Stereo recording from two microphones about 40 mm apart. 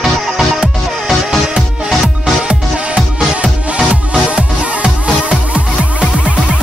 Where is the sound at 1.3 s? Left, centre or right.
Centre.